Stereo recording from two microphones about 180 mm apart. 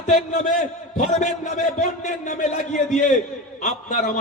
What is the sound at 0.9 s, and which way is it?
A man's voice, 40° left (ahead or behind).